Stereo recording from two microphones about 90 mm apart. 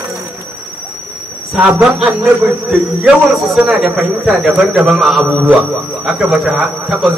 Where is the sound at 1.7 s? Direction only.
20° right (ahead or behind).